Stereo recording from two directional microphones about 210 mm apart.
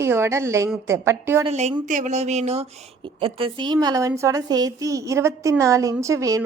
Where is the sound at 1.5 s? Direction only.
30° right (ahead or behind).